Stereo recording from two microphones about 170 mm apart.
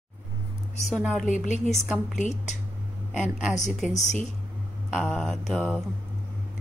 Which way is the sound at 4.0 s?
45° left (ahead or behind).